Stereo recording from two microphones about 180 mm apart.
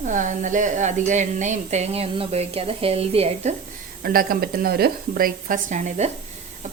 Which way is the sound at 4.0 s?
55° right (ahead or behind).